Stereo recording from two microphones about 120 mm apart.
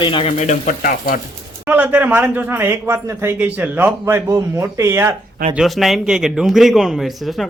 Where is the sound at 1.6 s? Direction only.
15° right (ahead or behind).